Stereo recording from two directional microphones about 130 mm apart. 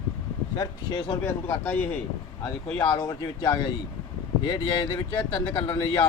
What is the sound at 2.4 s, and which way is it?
Speech, 25° left (ahead or behind).